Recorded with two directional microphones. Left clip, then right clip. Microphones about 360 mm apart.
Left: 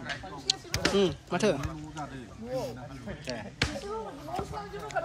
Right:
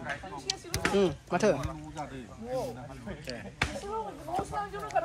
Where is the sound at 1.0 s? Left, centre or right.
Centre.